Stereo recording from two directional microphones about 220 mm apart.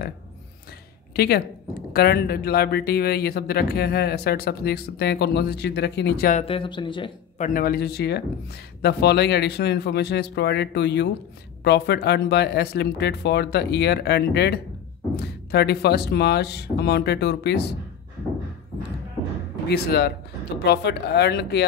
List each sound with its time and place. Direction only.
1.1 s a woman's voice: 45° left (ahead or behind)
6.3 s speech: 25° left (ahead or behind)
7.3 s a woman's voice: 35° left (ahead or behind)
19.7 s a woman's voice: 45° left (ahead or behind)